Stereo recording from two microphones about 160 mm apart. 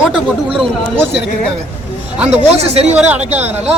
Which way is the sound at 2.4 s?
40° right (ahead or behind).